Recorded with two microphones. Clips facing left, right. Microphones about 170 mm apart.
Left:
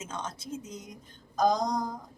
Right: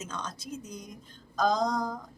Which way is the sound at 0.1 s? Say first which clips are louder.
Left 1 dB; 25° left (ahead or behind).